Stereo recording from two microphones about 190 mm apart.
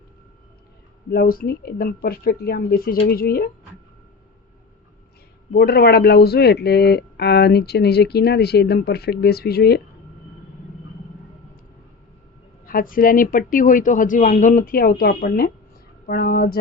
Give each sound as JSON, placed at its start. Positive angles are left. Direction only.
{"t": 1.1, "sound": "a woman's voice", "side_deg": 50}
{"t": 5.5, "sound": "speech", "side_deg": 55}
{"t": 12.6, "sound": "a woman's voice", "side_deg": 45}